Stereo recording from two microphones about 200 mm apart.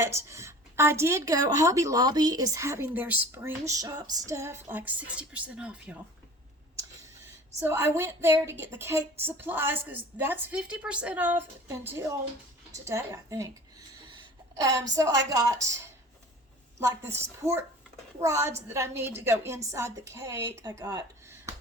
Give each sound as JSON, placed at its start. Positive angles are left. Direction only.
{"t": 0.0, "sound": "speech", "side_deg": -15}
{"t": 7.6, "sound": "a woman's voice", "side_deg": -10}